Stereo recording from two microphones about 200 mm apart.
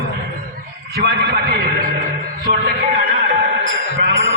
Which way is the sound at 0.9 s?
55° right (ahead or behind).